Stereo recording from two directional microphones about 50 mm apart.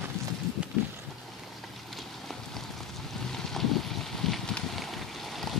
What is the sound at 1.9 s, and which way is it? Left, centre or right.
Clip-clop, centre.